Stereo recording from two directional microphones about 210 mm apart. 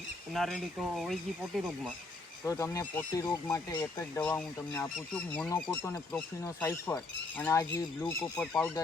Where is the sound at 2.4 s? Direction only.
15° left (ahead or behind).